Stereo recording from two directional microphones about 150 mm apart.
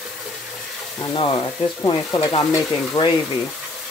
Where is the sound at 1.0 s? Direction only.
30° left (ahead or behind).